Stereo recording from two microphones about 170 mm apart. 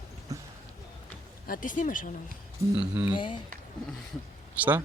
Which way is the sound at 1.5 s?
50° left (ahead or behind).